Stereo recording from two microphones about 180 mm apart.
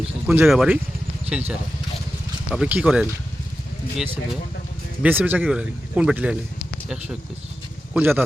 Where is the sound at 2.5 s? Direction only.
5° right (ahead or behind).